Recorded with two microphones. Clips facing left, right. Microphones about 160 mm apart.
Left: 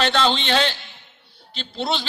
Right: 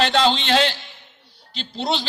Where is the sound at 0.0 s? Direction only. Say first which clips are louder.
Right 2 dB; 35° right (ahead or behind).